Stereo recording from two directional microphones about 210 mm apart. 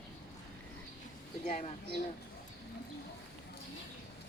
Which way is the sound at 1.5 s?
35° left (ahead or behind).